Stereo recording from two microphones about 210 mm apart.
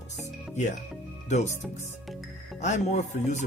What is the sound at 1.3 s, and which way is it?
Speech, 35° left (ahead or behind).